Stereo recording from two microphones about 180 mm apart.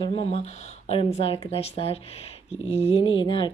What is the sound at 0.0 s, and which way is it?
Speech, 30° left (ahead or behind).